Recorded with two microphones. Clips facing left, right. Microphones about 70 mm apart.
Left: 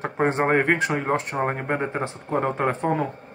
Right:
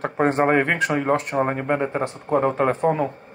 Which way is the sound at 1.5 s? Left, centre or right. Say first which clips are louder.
Right 3 dB; left.